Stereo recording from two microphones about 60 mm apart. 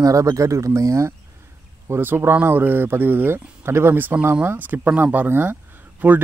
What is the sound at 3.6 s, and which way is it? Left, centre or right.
Speech, right.